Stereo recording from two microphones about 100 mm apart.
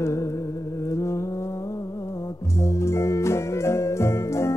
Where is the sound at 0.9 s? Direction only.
30° left (ahead or behind).